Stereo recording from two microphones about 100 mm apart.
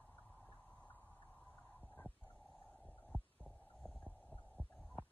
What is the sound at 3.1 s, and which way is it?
Heart sounds, 10° left (ahead or behind).